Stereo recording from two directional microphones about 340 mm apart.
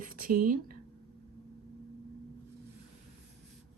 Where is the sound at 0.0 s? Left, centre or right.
Right.